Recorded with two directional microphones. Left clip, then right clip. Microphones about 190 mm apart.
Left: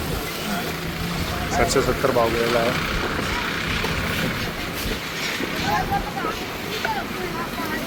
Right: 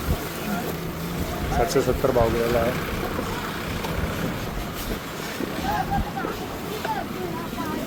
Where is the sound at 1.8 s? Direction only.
25° right (ahead or behind).